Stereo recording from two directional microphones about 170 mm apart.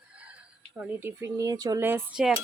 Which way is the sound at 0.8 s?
15° right (ahead or behind).